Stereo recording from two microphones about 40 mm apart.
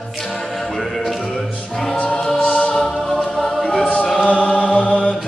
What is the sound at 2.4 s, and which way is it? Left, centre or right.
Music, left.